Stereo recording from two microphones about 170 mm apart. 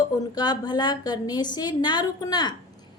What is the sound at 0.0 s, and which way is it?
A woman's voice, 25° left (ahead or behind).